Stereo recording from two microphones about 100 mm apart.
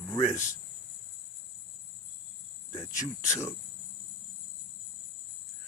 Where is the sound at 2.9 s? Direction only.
30° left (ahead or behind).